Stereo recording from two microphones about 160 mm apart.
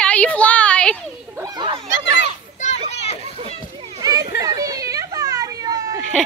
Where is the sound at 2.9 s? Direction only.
40° left (ahead or behind).